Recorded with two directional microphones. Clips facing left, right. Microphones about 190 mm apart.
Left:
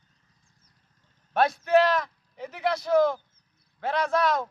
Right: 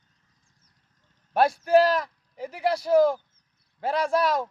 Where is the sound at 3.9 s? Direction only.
10° right (ahead or behind).